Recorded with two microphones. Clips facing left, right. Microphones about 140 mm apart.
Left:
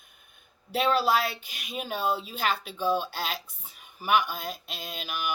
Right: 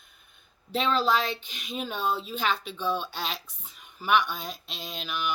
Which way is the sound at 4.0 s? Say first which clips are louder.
Even; 5° left (ahead or behind).